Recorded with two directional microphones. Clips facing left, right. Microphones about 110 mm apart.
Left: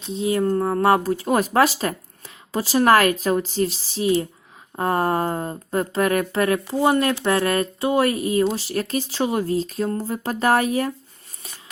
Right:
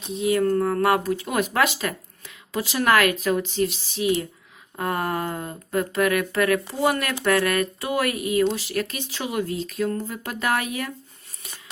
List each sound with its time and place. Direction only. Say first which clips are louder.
0.1 s speech: even; 30° left (ahead or behind)